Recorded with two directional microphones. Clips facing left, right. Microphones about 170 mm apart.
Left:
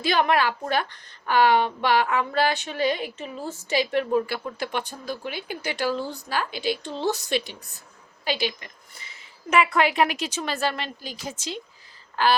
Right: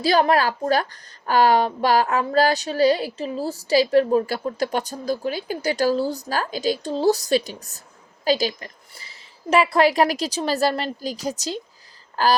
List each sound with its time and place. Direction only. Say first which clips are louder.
0.0 s a woman's voice: right 4 dB; 35° right (ahead or behind)